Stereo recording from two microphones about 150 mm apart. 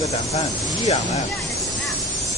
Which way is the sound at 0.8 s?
50° left (ahead or behind).